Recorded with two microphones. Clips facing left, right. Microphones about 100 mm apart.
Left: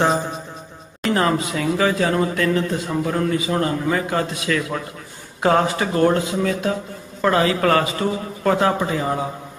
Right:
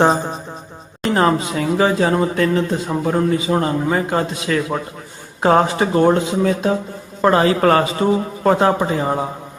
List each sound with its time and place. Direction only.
0.0 s music: 35° right (ahead or behind)
1.0 s speech: 30° right (ahead or behind)